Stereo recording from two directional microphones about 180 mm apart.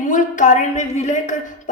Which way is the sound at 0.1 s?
45° left (ahead or behind).